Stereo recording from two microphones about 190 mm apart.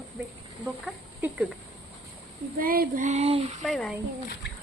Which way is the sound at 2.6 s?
50° right (ahead or behind).